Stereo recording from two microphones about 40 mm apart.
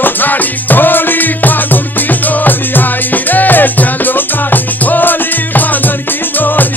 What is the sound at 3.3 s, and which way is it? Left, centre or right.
Music, left.